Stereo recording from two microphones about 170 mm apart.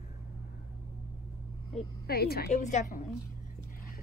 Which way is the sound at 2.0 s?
65° left (ahead or behind).